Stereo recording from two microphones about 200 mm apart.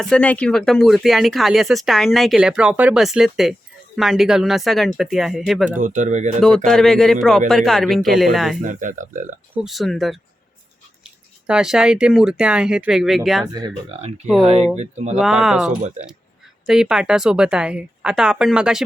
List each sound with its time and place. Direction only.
0.0 s speech: 5° left (ahead or behind)
5.7 s speech: 40° right (ahead or behind)
6.7 s speech: centre (ahead or behind)
8.6 s speech: 40° right (ahead or behind)
9.6 s speech: centre (ahead or behind)
14.4 s speech: 30° right (ahead or behind)
15.2 s speech: 5° right (ahead or behind)